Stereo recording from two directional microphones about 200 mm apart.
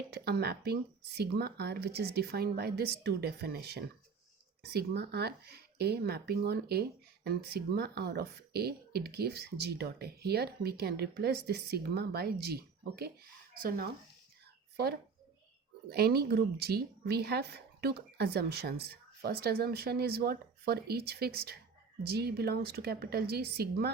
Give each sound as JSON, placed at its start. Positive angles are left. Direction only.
{"t": 0.1, "sound": "speech", "side_deg": -55}
{"t": 15.9, "sound": "speech", "side_deg": -50}